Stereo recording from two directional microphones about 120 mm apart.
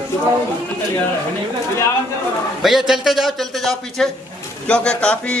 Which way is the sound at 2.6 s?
Centre (ahead or behind).